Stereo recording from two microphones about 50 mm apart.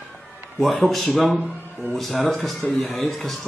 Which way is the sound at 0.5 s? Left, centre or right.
Centre.